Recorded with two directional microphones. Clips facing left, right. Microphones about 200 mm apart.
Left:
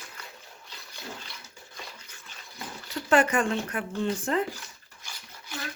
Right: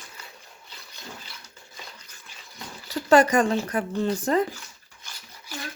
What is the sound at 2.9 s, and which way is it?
Speech, 40° right (ahead or behind).